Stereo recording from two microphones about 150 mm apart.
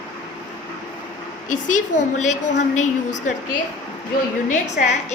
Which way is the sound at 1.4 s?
55° left (ahead or behind).